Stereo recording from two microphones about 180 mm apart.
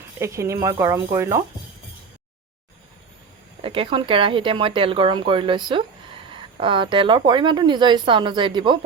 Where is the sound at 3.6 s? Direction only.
30° right (ahead or behind).